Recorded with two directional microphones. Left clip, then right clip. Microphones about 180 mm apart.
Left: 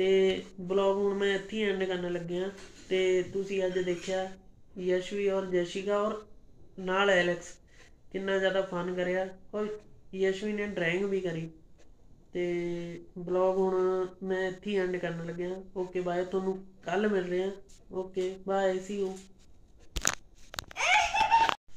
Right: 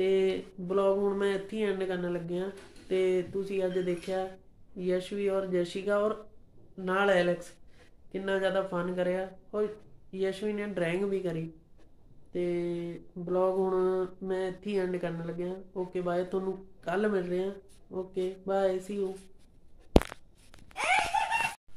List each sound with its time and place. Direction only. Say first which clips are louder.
0.0 s speech: left 2 dB; 10° right (ahead or behind)